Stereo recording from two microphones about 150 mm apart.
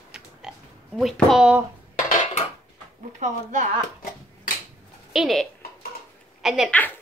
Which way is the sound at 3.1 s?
50° right (ahead or behind).